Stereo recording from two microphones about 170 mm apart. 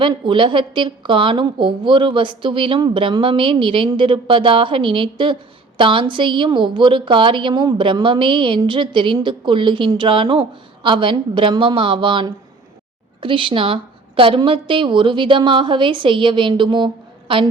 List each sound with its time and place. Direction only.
0.0 s a woman's voice: 30° right (ahead or behind)